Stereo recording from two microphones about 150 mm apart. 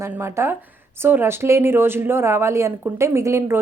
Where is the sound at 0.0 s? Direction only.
15° right (ahead or behind).